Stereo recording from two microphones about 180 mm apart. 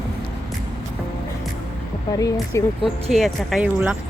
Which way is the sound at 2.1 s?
20° left (ahead or behind).